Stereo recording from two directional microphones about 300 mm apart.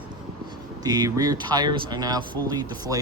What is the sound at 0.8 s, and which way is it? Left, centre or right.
Speech, centre.